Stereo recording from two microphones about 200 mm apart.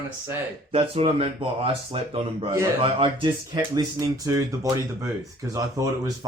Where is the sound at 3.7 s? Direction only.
15° right (ahead or behind).